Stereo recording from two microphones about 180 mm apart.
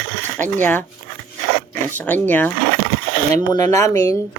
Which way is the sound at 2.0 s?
10° left (ahead or behind).